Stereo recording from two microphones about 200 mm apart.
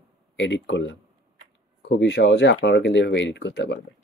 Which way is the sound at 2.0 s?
60° left (ahead or behind).